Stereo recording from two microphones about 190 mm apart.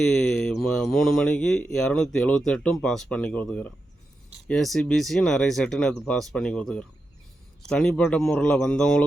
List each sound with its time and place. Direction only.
0.0 s speech: centre (ahead or behind)